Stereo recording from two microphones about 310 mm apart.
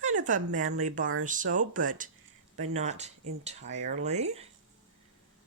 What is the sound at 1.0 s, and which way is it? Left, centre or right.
Speech, right.